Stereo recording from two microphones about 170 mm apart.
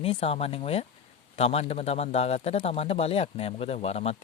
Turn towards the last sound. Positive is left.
turn(degrees=40)  # may be behind; listen again after turning